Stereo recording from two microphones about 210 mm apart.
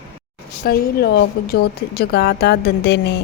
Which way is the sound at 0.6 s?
45° left (ahead or behind).